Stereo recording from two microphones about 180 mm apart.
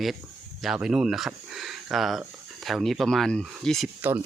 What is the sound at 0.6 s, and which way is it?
Speech, 5° right (ahead or behind).